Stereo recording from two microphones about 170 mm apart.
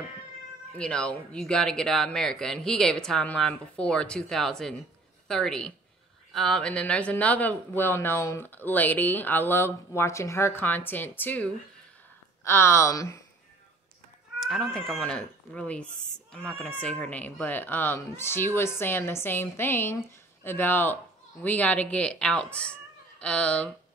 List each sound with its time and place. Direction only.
0.7 s speech: 5° left (ahead or behind)
14.4 s speech: centre (ahead or behind)